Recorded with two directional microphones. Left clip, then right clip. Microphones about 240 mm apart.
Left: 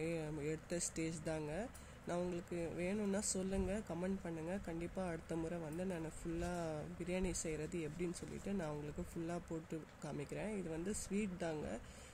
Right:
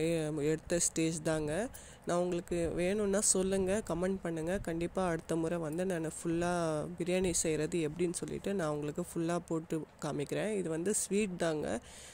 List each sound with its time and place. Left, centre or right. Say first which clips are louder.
0.0 s speech: right 10 dB; right